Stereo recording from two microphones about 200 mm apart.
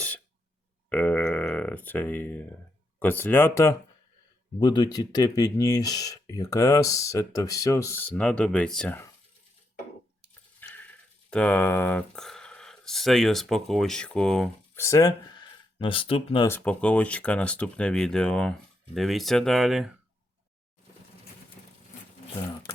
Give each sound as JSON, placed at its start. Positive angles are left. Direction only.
{"t": 0.9, "sound": "a sound", "side_deg": 5}
{"t": 3.0, "sound": "speech", "side_deg": 10}
{"t": 10.6, "sound": "a sound", "side_deg": 10}
{"t": 11.3, "sound": "speech", "side_deg": 5}
{"t": 14.8, "sound": "speech", "side_deg": 15}
{"t": 16.5, "sound": "speech", "side_deg": 5}